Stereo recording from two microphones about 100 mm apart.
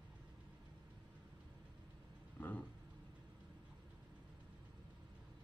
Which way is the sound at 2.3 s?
20° left (ahead or behind).